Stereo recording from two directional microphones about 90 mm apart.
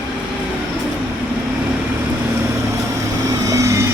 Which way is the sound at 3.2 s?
35° right (ahead or behind).